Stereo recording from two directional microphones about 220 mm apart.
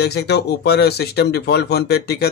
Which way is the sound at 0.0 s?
50° left (ahead or behind).